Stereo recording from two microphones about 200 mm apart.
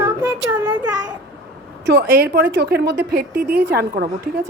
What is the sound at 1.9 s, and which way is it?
A woman's voice, 50° right (ahead or behind).